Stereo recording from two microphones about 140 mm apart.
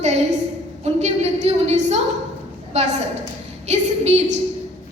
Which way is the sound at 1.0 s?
50° right (ahead or behind).